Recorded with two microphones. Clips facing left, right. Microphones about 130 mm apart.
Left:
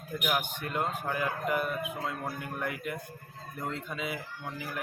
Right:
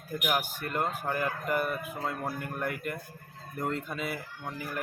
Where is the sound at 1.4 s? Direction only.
Centre (ahead or behind).